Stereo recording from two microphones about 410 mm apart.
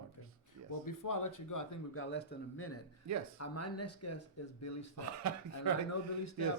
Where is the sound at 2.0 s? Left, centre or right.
Left.